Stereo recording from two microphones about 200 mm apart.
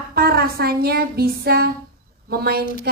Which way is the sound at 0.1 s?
50° right (ahead or behind).